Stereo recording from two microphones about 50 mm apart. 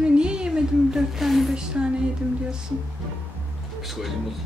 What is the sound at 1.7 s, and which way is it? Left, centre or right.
Speech, centre.